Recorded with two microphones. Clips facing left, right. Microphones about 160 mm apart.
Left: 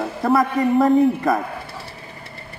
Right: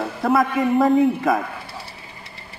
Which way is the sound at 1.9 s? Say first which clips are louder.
Left 3 dB; 50° left (ahead or behind).